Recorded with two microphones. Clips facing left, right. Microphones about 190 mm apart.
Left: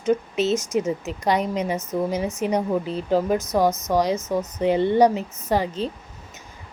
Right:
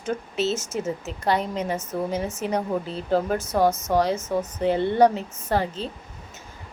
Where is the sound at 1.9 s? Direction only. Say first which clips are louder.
Left 4 dB; 15° left (ahead or behind).